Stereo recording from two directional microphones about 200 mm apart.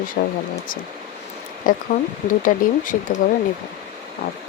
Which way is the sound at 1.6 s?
40° left (ahead or behind).